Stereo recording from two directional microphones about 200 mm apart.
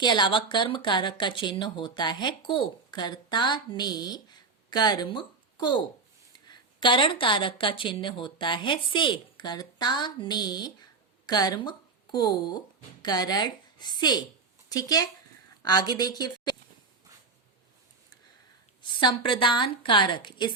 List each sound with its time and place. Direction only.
0.0 s a woman's voice: 20° left (ahead or behind)
18.8 s speech: 25° left (ahead or behind)